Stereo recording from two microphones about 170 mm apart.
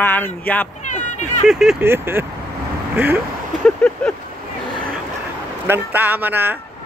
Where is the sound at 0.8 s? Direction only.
45° left (ahead or behind).